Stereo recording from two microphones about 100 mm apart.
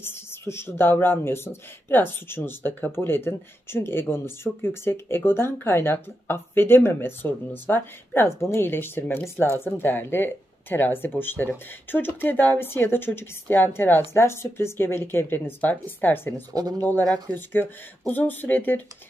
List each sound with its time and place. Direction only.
0.0 s speech: 25° left (ahead or behind)